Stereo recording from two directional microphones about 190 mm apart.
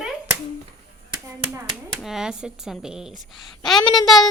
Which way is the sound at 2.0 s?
Centre (ahead or behind).